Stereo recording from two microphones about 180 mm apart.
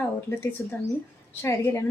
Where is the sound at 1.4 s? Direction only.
15° left (ahead or behind).